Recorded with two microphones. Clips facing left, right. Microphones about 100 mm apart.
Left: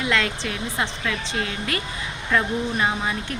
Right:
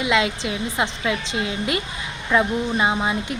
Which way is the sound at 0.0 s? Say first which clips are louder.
Right 3 dB; 15° right (ahead or behind).